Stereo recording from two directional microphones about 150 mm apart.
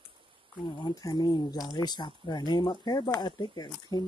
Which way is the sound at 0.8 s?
25° left (ahead or behind).